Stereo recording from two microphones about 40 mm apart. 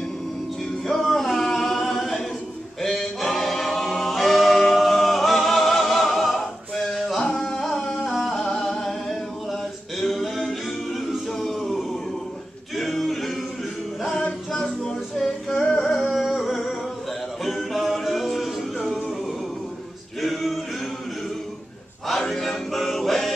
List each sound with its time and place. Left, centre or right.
0.8 s a capella: centre
7.2 s music: centre
9.5 s a capella: centre
12.7 s music: centre
15.1 s music: centre
16.1 s music: centre
20.2 s music: centre
22.0 s music: centre